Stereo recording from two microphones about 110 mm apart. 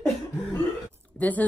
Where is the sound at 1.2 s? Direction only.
15° left (ahead or behind).